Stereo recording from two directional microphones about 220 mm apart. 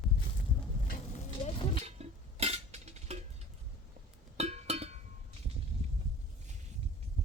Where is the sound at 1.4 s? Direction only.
25° left (ahead or behind).